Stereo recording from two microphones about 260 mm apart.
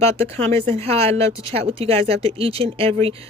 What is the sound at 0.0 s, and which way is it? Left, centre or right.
Speech, right.